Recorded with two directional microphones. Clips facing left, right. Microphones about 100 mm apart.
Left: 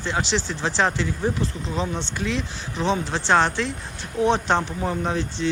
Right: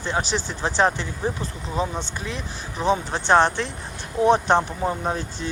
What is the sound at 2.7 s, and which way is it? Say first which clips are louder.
Speech: right 1 dB; 15° right (ahead or behind).